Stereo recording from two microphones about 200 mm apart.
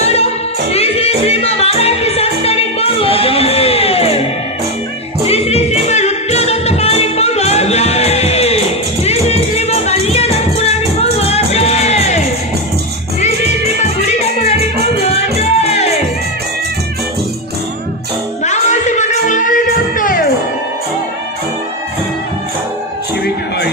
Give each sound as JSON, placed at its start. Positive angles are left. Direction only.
{"t": 0.0, "sound": "music", "side_deg": 30}
{"t": 5.2, "sound": "music", "side_deg": 30}
{"t": 14.0, "sound": "music", "side_deg": 35}
{"t": 18.4, "sound": "music", "side_deg": 35}